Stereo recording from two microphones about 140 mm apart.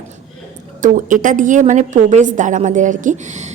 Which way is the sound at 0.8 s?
70° right (ahead or behind).